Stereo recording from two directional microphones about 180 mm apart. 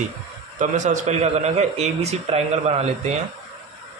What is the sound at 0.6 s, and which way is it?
A man's voice, 40° right (ahead or behind).